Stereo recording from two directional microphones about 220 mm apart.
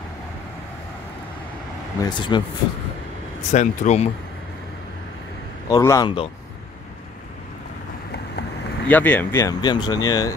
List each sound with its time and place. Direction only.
2.0 s speech: 20° left (ahead or behind)
3.5 s speech: 30° left (ahead or behind)
5.7 s speech: 15° left (ahead or behind)
8.1 s vehicle: 50° left (ahead or behind)
8.8 s speech: 5° left (ahead or behind)